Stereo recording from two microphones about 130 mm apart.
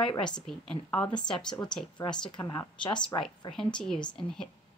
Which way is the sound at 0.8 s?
10° left (ahead or behind).